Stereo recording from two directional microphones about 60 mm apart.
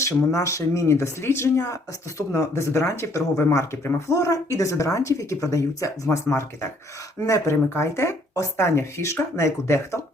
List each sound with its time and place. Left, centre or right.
0.0 s speech: left
4.1 s speech: left
6.1 s speech: left